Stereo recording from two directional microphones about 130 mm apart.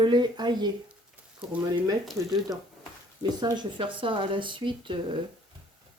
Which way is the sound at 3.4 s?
35° right (ahead or behind).